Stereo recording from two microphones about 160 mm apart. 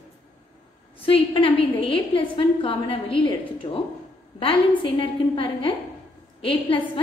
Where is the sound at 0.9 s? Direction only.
35° left (ahead or behind).